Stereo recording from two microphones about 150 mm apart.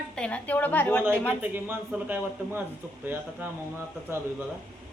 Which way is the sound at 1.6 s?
15° right (ahead or behind).